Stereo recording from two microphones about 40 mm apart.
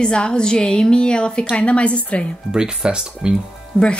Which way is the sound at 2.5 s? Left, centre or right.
Right.